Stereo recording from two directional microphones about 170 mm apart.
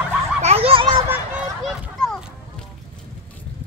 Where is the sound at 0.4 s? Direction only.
35° right (ahead or behind).